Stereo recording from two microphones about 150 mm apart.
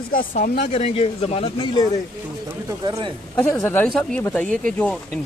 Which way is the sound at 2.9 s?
35° right (ahead or behind).